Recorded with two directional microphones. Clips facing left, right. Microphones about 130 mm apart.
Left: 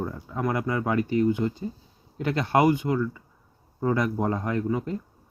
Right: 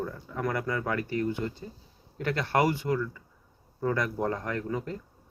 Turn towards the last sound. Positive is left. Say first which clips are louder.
# left 5 dB
turn(degrees=20)  # may be behind; listen again after turning